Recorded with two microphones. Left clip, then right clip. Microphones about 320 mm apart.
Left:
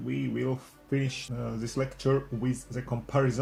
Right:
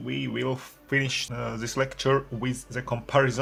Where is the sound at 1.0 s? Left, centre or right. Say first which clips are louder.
Right 7 dB; right.